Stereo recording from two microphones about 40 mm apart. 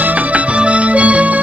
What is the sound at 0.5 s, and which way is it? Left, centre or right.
Music, right.